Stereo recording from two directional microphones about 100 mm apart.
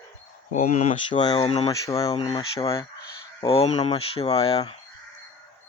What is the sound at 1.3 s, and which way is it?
Speech, 70° left (ahead or behind).